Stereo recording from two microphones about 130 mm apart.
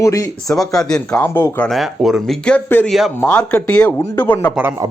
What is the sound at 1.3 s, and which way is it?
Speech, 20° left (ahead or behind).